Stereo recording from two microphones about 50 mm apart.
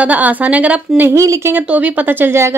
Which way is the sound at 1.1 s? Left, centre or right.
Right.